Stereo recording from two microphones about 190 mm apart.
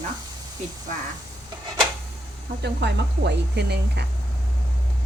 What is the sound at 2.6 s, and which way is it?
Speech, 65° right (ahead or behind).